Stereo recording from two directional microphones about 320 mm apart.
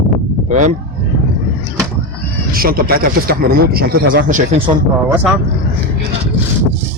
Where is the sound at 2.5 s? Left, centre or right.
Right.